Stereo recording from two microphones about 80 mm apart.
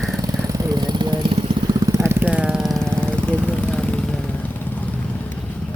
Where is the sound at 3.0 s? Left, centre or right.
Centre.